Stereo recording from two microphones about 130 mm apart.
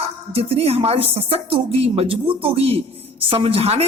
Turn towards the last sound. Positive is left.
turn(degrees=-50)  # may be behind; listen again after turning